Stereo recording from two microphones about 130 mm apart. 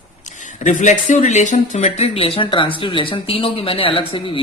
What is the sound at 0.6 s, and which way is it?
Speech, 75° left (ahead or behind).